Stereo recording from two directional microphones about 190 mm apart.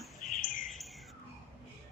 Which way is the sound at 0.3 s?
45° left (ahead or behind).